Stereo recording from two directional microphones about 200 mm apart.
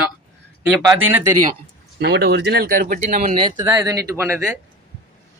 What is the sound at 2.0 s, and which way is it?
Speech, 55° right (ahead or behind).